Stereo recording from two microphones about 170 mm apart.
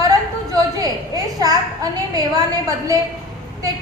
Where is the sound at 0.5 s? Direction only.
20° right (ahead or behind).